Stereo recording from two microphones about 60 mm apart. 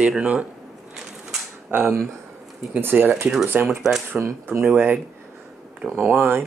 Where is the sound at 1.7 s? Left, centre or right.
Right.